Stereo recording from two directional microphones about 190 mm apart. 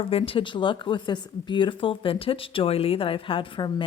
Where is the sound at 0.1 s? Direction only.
30° left (ahead or behind).